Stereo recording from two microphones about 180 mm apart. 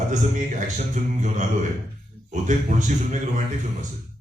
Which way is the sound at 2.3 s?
40° right (ahead or behind).